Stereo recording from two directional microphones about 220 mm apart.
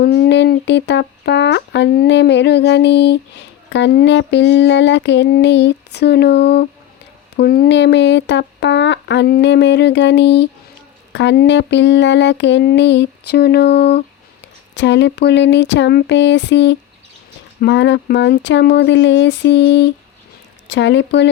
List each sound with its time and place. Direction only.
0.0 s speech: 45° left (ahead or behind)